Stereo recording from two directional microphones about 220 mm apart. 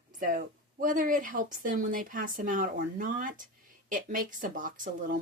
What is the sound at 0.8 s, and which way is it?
Speech, 35° right (ahead or behind).